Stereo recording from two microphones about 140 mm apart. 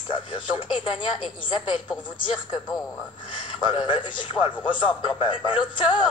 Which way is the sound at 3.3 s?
35° left (ahead or behind).